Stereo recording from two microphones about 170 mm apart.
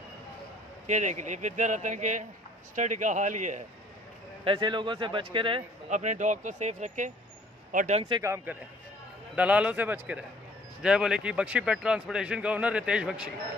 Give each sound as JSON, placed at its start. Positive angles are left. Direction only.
{"t": 0.8, "sound": "speech", "side_deg": -45}
{"t": 4.5, "sound": "speech", "side_deg": -30}
{"t": 5.9, "sound": "a man's voice", "side_deg": -45}
{"t": 8.2, "sound": "a man's voice", "side_deg": -15}